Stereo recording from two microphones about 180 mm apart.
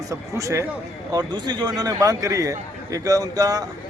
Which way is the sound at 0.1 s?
15° right (ahead or behind).